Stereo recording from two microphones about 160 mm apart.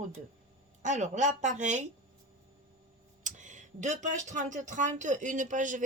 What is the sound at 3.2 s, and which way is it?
Speech, 50° right (ahead or behind).